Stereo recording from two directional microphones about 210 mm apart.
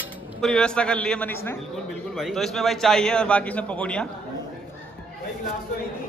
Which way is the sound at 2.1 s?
Centre (ahead or behind).